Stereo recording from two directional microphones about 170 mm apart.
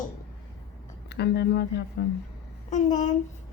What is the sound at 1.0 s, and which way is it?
Speech, 80° left.